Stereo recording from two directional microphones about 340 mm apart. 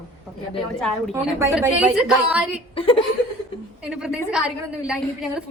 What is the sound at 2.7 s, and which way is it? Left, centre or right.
Speech, centre.